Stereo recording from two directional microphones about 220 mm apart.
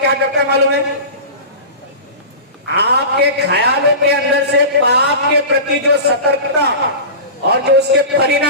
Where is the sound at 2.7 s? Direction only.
50° right (ahead or behind).